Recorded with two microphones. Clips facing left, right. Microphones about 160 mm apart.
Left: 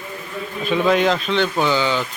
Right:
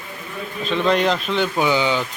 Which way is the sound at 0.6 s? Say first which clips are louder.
Left 2 dB; 10° left (ahead or behind).